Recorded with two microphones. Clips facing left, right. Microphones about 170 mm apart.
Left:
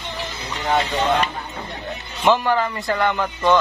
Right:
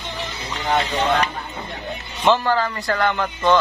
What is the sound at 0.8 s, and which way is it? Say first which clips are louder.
Speech: even; 5° left (ahead or behind).